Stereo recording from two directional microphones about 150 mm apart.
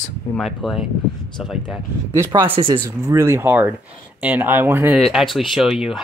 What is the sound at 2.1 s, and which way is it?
Speech, 15° right (ahead or behind).